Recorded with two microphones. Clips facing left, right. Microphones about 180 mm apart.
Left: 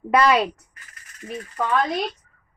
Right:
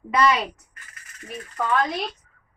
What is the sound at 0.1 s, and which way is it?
Speech, 60° left (ahead or behind).